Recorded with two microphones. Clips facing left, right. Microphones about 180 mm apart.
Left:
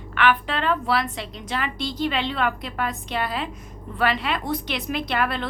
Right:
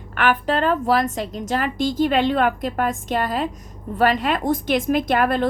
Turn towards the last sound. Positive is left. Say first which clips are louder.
# right 6 dB
turn(degrees=-45)  # may be behind; listen again after turning